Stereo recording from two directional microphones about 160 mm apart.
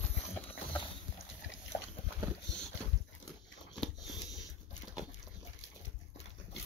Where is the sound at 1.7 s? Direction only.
50° left (ahead or behind).